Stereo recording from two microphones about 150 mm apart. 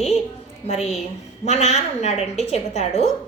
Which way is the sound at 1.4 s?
45° left (ahead or behind).